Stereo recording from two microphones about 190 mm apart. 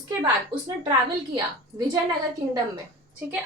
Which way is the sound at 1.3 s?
20° right (ahead or behind).